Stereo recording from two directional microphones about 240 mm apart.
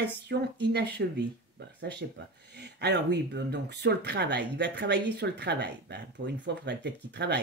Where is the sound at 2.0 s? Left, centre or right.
Right.